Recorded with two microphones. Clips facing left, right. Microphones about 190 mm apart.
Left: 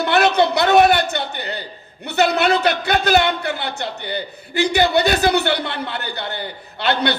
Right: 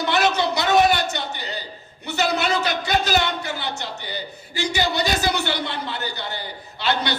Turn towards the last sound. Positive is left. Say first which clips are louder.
# left 4 dB
turn(degrees=60)  # may be behind; listen again after turning